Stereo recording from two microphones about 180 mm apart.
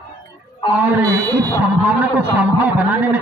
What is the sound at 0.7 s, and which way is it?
Speech, 10° right (ahead or behind).